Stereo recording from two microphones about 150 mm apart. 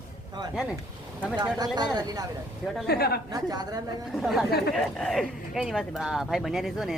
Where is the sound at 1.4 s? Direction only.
25° right (ahead or behind).